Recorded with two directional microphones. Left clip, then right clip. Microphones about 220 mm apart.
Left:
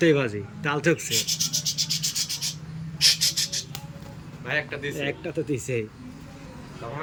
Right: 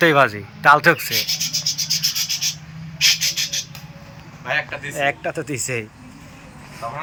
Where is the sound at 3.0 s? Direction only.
20° left (ahead or behind).